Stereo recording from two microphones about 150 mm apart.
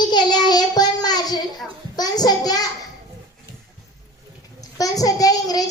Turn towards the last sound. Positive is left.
turn(degrees=25)  # may be behind; listen again after turning